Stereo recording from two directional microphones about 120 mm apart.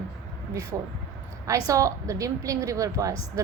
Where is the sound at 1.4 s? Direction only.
25° right (ahead or behind).